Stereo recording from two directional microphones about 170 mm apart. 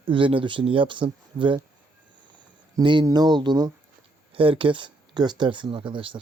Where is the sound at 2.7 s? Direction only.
25° right (ahead or behind).